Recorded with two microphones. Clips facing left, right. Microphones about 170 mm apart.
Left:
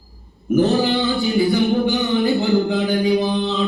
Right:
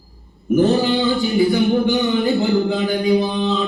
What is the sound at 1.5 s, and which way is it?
Music, centre (ahead or behind).